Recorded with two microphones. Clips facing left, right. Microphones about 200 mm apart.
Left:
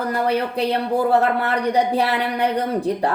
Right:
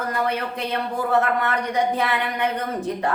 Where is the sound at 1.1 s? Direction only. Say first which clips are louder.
Even; 35° left (ahead or behind).